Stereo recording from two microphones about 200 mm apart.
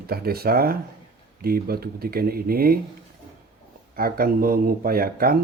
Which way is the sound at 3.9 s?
45° right (ahead or behind).